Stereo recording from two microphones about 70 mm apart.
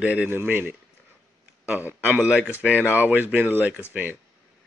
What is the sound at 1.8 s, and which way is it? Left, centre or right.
Speech, right.